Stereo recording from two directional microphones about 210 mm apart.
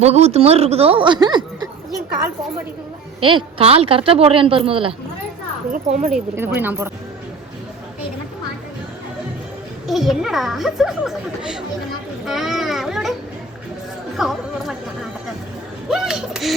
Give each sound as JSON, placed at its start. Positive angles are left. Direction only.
{"t": 0.0, "sound": "a woman's voice", "side_deg": -30}
{"t": 3.2, "sound": "a woman's voice", "side_deg": -25}
{"t": 5.7, "sound": "a sound", "side_deg": -30}
{"t": 6.3, "sound": "speech", "side_deg": -10}
{"t": 9.8, "sound": "a child's voice", "side_deg": 0}
{"t": 14.2, "sound": "speech", "side_deg": 0}
{"t": 15.9, "sound": "speech", "side_deg": -5}